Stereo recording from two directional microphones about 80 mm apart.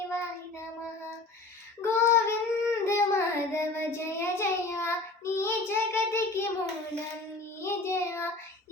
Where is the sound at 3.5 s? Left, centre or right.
Left.